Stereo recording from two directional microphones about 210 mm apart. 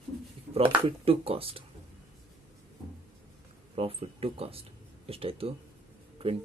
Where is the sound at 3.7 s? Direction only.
25° right (ahead or behind).